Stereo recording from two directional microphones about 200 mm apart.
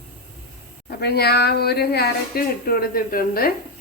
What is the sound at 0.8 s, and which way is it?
Speech, 55° left (ahead or behind).